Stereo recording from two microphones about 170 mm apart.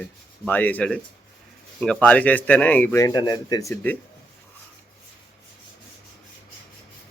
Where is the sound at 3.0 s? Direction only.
20° left (ahead or behind).